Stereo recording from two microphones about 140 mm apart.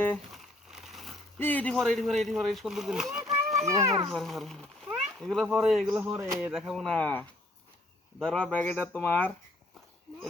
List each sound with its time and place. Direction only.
0.3 s a sound: centre (ahead or behind)
1.4 s a child's voice: 10° left (ahead or behind)
3.7 s speech: 20° right (ahead or behind)
4.1 s a child's voice: centre (ahead or behind)
6.0 s speech: 20° right (ahead or behind)
6.5 s a child's voice: 5° right (ahead or behind); by 9.3 s 15° left (ahead or behind)